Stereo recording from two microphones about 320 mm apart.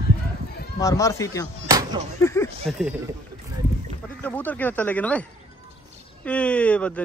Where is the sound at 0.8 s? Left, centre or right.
Centre.